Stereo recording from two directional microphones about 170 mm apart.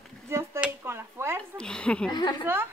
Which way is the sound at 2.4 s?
15° right (ahead or behind).